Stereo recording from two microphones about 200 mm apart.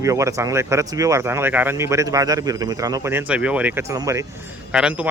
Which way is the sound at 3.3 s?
5° right (ahead or behind).